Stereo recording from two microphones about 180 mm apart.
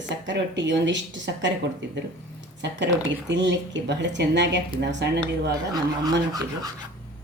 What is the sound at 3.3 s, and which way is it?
A woman's voice, 80° right.